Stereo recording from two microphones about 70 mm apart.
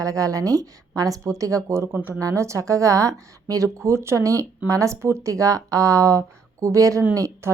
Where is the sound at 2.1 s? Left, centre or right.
Right.